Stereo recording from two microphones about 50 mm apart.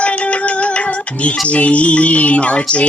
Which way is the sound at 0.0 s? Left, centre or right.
Left.